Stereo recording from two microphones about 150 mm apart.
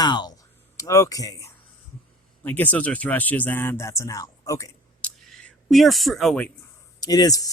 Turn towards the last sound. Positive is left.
turn(degrees=25)  # may be behind; listen again after turning